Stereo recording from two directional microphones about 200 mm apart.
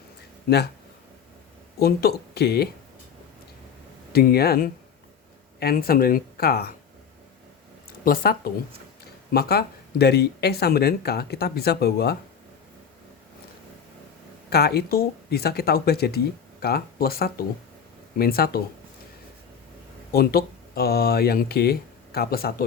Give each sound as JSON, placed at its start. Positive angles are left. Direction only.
{"t": 1.8, "sound": "speech", "side_deg": 50}
{"t": 4.1, "sound": "speech", "side_deg": 50}
{"t": 8.0, "sound": "speech", "side_deg": 45}
{"t": 14.5, "sound": "speech", "side_deg": 55}
{"t": 20.1, "sound": "speech", "side_deg": 50}